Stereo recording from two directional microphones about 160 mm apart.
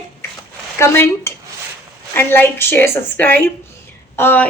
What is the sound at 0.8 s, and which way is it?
A woman's voice, 15° left (ahead or behind).